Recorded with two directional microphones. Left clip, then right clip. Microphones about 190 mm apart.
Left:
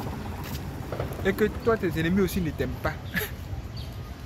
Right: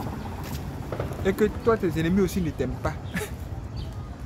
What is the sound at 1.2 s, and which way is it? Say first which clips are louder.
Speech: right 2 dB; 10° right (ahead or behind).